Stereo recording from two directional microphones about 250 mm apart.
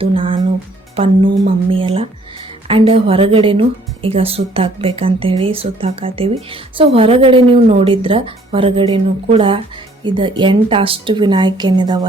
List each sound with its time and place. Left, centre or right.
0.0 s speech: right